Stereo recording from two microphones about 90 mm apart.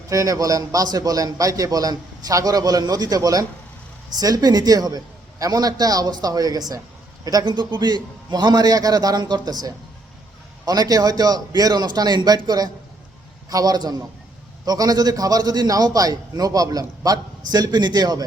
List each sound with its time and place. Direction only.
0.1 s a man's voice: 40° right (ahead or behind)